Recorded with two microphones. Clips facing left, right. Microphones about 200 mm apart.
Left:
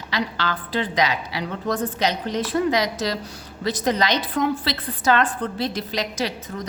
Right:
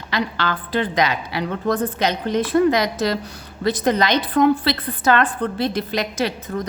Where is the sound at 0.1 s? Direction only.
55° right (ahead or behind).